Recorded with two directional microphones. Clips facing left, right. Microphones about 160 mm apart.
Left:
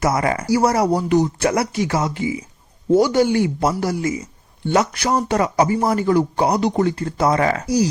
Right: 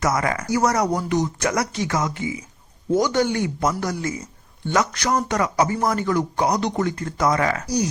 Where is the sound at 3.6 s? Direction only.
30° left (ahead or behind).